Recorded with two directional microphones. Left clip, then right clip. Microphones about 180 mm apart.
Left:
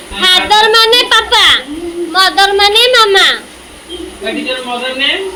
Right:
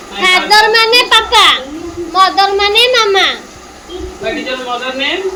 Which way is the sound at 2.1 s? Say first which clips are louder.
Left 1 dB; centre (ahead or behind).